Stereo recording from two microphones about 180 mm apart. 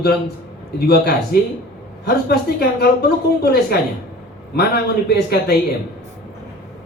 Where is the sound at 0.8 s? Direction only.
60° left (ahead or behind).